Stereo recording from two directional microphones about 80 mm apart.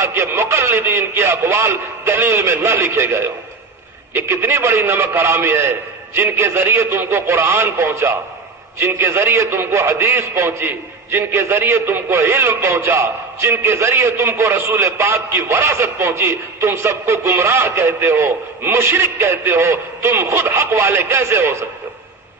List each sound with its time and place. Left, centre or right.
0.0 s a man's voice: right